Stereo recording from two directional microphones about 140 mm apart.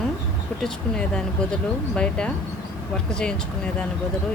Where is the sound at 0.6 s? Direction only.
5° left (ahead or behind).